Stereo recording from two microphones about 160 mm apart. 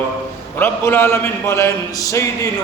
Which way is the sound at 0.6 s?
15° left (ahead or behind).